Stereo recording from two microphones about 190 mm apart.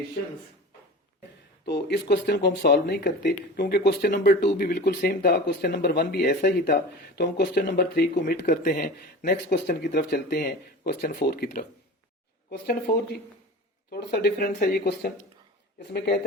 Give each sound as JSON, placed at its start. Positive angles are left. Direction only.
{"t": 1.6, "sound": "speech", "side_deg": 60}
{"t": 10.0, "sound": "speech", "side_deg": 60}